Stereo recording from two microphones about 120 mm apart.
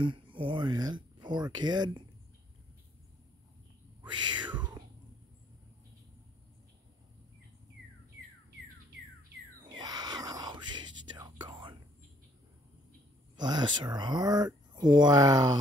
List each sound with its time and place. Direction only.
0.0 s speech: 45° right (ahead or behind)
4.0 s speech: 40° right (ahead or behind)
9.7 s whispering: 35° right (ahead or behind)
13.4 s speech: 35° right (ahead or behind)